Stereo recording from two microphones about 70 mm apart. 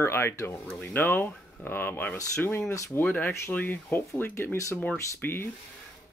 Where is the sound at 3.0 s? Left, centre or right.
Left.